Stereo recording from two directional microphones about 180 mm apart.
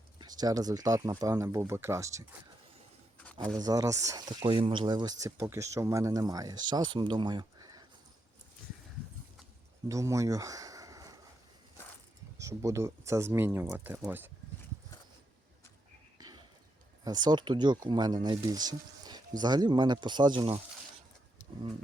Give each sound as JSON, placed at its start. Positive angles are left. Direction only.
{"t": 0.2, "sound": "speech", "side_deg": -20}
{"t": 3.6, "sound": "speech", "side_deg": -20}
{"t": 9.9, "sound": "a sound", "side_deg": -15}
{"t": 12.4, "sound": "speech", "side_deg": -15}
{"t": 16.2, "sound": "a sound", "side_deg": -20}
{"t": 17.0, "sound": "speech", "side_deg": -25}